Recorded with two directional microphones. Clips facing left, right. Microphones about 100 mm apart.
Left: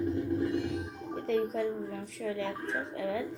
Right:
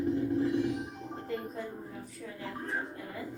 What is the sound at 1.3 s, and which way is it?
Speech, 90° left.